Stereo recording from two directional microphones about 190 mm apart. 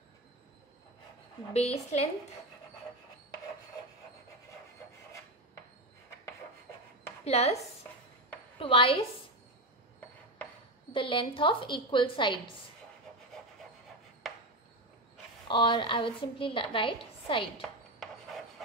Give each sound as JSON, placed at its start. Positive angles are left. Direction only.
{"t": 1.5, "sound": "a woman's voice", "side_deg": 35}
{"t": 7.2, "sound": "a woman's voice", "side_deg": 35}
{"t": 8.5, "sound": "a woman's voice", "side_deg": 30}
{"t": 10.9, "sound": "a woman's voice", "side_deg": 25}
{"t": 14.2, "sound": "chopping", "side_deg": 0}
{"t": 15.4, "sound": "a woman's voice", "side_deg": 25}
{"t": 17.6, "sound": "a sound", "side_deg": 0}